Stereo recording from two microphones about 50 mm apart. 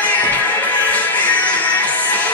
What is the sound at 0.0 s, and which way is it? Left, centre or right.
Music, left.